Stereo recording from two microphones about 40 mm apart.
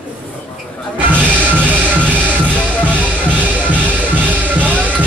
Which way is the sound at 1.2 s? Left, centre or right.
Right.